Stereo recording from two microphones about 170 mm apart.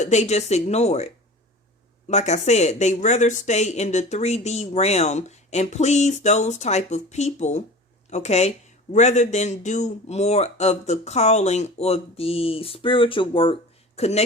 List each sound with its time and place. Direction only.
0.0 s speech: 40° left (ahead or behind)